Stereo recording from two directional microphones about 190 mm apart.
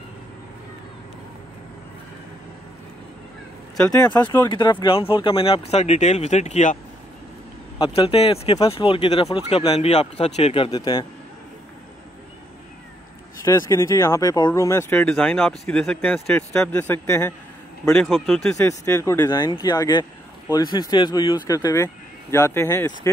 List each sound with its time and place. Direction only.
3.7 s speech: 5° left (ahead or behind)
4.5 s speech: 25° left (ahead or behind)
7.8 s speech: 30° left (ahead or behind)
13.4 s speech: 15° left (ahead or behind)
17.9 s speech: centre (ahead or behind)
18.7 s speech: 15° left (ahead or behind)